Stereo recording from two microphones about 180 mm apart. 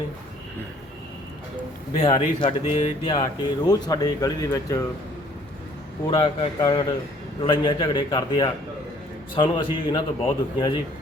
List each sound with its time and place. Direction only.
2.0 s speech: 35° left (ahead or behind)
6.1 s speech: 30° left (ahead or behind)